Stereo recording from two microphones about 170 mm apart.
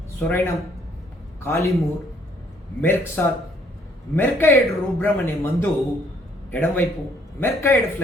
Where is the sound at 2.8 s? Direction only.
15° left (ahead or behind).